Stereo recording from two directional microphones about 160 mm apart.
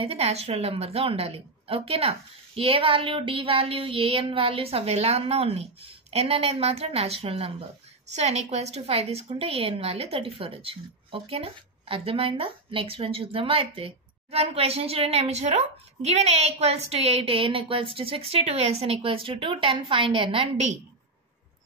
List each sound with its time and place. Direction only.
0.0 s a woman's voice: 40° right (ahead or behind)